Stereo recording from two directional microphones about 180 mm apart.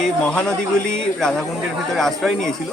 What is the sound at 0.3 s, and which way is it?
Speech, 5° left (ahead or behind).